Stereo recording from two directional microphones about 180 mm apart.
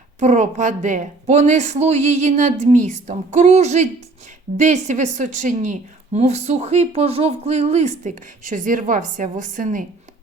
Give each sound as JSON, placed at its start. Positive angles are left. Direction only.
{"t": 0.2, "sound": "a woman's voice", "side_deg": -40}